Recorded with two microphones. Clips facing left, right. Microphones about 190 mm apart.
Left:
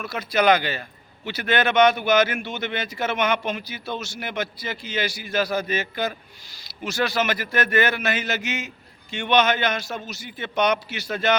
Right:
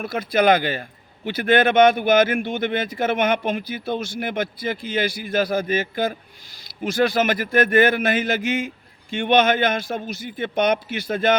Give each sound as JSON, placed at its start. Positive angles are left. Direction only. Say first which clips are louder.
{"t": 0.0, "sound": "a man's voice", "louder": "right 2 dB", "side_deg": -50}